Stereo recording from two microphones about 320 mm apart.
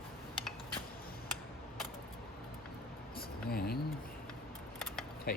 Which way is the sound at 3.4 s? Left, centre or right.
Left.